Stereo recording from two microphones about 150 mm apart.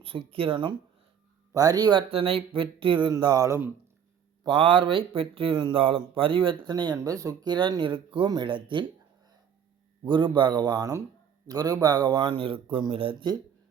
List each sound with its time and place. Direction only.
0.0 s speech: 35° right (ahead or behind); by 3.7 s 20° right (ahead or behind)
4.4 s speech: 35° right (ahead or behind)